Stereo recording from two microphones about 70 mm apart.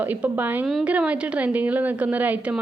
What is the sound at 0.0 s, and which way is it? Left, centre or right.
A woman's voice, right.